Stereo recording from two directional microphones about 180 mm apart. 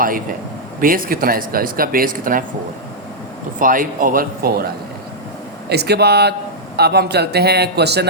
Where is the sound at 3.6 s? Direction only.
50° right (ahead or behind).